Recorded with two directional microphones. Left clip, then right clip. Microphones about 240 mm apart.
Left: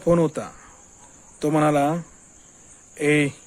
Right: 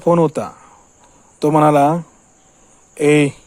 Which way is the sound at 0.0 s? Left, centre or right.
Right.